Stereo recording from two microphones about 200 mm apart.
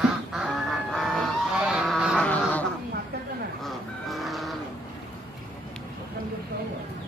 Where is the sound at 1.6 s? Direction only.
Centre (ahead or behind).